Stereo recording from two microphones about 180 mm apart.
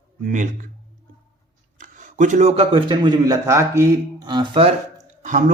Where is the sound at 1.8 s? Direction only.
45° right (ahead or behind); by 4.7 s 25° right (ahead or behind).